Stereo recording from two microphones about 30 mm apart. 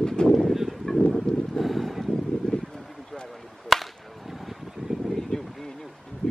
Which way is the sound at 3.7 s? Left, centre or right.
Centre.